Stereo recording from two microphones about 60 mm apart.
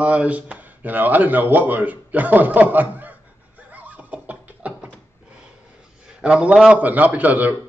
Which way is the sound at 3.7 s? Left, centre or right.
Right.